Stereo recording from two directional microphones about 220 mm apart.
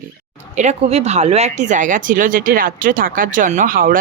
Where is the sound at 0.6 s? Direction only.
30° right (ahead or behind).